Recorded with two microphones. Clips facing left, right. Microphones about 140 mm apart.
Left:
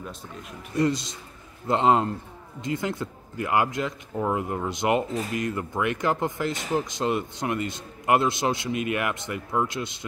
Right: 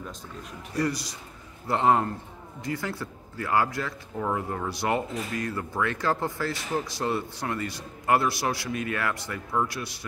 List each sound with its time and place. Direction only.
0.7 s speech: 20° left (ahead or behind)